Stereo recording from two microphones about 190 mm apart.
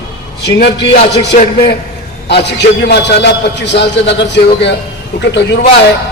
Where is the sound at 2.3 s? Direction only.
65° left (ahead or behind).